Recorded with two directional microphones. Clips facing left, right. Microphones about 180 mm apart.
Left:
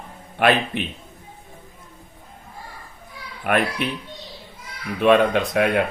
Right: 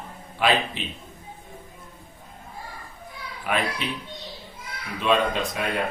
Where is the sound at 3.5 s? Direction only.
55° left (ahead or behind).